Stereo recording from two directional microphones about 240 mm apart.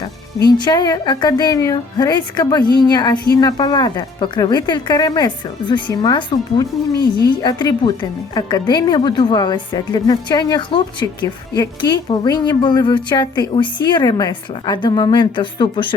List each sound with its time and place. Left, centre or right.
0.4 s speech: centre